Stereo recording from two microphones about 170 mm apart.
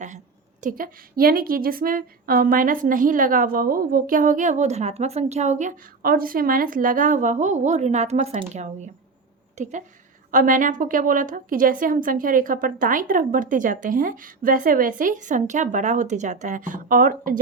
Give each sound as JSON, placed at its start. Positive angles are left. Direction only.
{"t": 0.6, "sound": "a woman's voice", "side_deg": -55}
{"t": 10.3, "sound": "a woman's voice", "side_deg": -50}